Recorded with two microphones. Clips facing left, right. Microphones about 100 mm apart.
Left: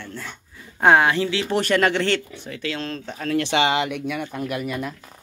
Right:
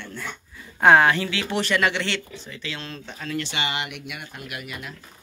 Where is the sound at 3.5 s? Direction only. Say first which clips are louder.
Left 12 dB; 90° left.